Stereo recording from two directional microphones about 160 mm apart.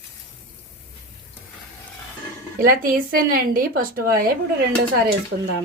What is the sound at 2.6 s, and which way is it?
A woman's voice, 60° right (ahead or behind).